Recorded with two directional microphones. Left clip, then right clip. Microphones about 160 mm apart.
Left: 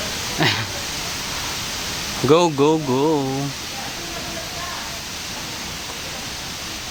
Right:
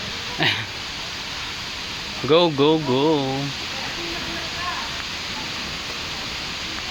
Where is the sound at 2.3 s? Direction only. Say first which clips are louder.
Left 1 dB; 20° left (ahead or behind).